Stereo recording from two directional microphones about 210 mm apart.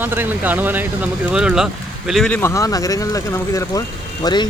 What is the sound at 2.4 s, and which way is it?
Speech, 15° left (ahead or behind).